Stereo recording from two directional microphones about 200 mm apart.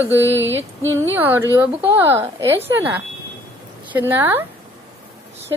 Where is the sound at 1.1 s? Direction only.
10° right (ahead or behind).